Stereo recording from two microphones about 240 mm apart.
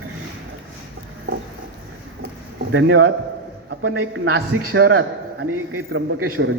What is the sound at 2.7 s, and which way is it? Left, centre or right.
A man's voice, right.